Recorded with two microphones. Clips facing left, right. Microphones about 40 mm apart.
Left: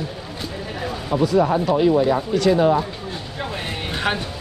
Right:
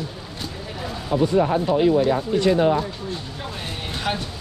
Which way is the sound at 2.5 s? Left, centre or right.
Centre.